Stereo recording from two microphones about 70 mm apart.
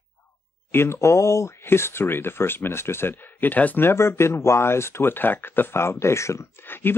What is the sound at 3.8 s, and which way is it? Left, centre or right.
Speech, left.